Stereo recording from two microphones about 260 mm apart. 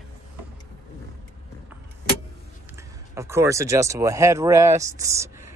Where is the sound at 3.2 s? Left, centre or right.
Centre.